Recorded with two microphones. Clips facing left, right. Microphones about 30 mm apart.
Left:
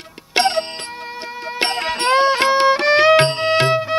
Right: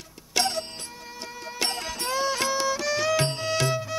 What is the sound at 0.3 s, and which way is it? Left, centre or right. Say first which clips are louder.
Music: left 9 dB; left.